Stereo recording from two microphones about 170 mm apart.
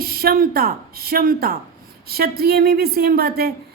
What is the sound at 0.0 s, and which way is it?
A woman's voice, 65° right (ahead or behind).